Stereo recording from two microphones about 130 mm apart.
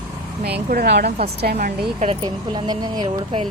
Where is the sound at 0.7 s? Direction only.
90° right.